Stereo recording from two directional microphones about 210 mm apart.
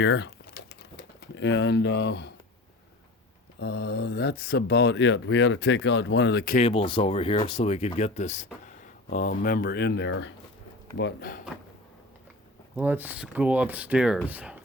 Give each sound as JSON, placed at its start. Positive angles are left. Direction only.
{"t": 0.0, "sound": "typing", "side_deg": 60}
{"t": 3.6, "sound": "speech", "side_deg": 50}
{"t": 6.7, "sound": "speech", "side_deg": 25}
{"t": 12.7, "sound": "speech", "side_deg": -10}